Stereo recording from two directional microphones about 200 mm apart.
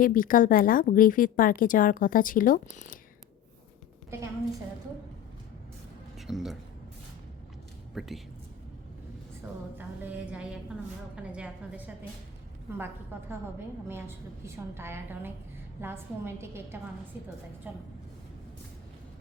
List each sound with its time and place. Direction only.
0.0 s a woman's voice: 45° left (ahead or behind)
6.1 s speech: centre (ahead or behind)
7.9 s a woman's voice: centre (ahead or behind)
9.7 s a woman's voice: 10° right (ahead or behind)